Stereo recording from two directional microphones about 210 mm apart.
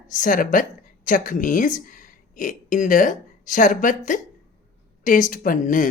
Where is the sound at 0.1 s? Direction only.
40° left (ahead or behind).